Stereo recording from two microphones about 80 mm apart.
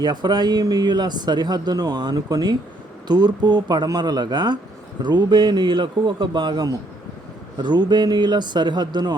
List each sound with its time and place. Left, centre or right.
0.0 s speech: right